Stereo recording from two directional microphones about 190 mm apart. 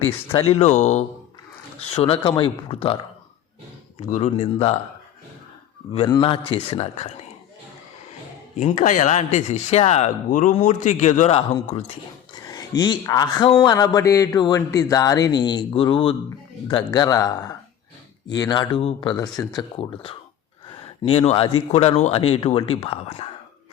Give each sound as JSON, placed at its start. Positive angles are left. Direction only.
{"t": 0.5, "sound": "speech", "side_deg": 35}
{"t": 5.9, "sound": "speech", "side_deg": 30}
{"t": 8.5, "sound": "speech", "side_deg": 40}
{"t": 12.3, "sound": "speech", "side_deg": 20}